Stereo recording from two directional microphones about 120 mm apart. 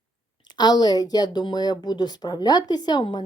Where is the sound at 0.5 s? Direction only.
35° left (ahead or behind).